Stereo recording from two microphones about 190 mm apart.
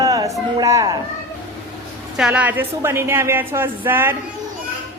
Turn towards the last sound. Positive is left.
turn(degrees=-10)  # may be behind; listen again after turning